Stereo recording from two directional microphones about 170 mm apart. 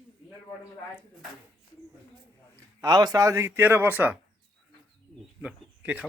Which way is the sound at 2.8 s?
20° right (ahead or behind).